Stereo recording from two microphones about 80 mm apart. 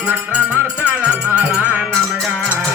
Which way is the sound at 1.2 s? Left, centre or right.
Right.